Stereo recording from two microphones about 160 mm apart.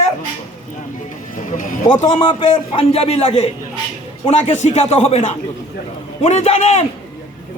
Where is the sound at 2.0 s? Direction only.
25° left (ahead or behind); by 6.8 s 45° left (ahead or behind).